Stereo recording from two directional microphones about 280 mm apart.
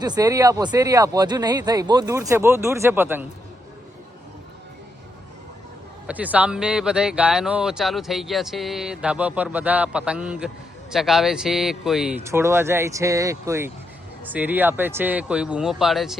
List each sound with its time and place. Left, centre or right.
0.0 s speech: centre
6.1 s speech: centre